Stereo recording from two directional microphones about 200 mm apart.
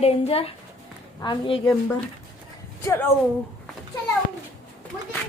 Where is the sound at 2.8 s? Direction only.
15° left (ahead or behind).